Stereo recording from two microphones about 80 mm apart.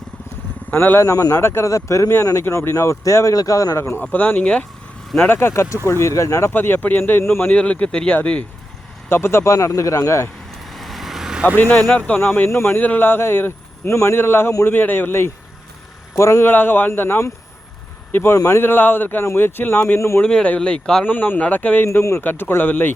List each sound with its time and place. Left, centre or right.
0.7 s speech: left
1.4 s speech: left
4.0 s speech: left
6.5 s speech: left
7.5 s speech: centre
9.0 s speech: left
10.7 s vehicle: centre
11.5 s speech: left
16.5 s speech: left
18.6 s speech: left
20.0 s speech: left
20.2 s speech: centre
21.0 s speech: left